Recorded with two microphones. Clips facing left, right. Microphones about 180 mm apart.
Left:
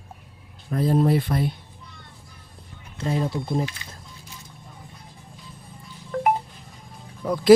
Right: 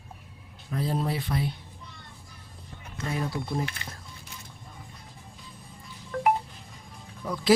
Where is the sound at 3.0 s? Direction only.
25° left (ahead or behind).